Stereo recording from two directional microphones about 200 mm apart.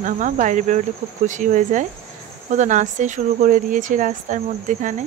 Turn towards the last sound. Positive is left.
turn(degrees=-40)  # may be behind; listen again after turning